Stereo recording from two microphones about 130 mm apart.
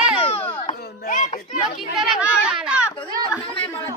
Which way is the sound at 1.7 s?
Centre (ahead or behind).